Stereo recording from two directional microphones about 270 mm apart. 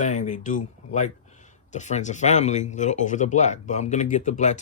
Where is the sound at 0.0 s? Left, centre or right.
Left.